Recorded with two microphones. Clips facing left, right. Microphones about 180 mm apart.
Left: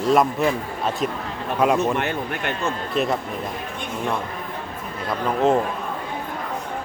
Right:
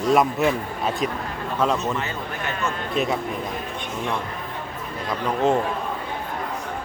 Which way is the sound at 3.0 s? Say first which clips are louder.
Left 1 dB; centre (ahead or behind).